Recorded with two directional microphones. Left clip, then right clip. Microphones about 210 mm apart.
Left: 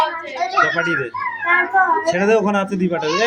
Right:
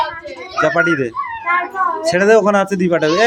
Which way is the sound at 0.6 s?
30° right (ahead or behind).